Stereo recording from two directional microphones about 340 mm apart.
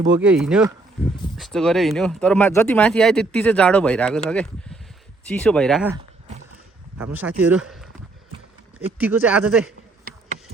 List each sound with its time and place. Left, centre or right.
0.2 s speech: centre
7.0 s speech: centre
9.0 s speech: centre
10.0 s insect: right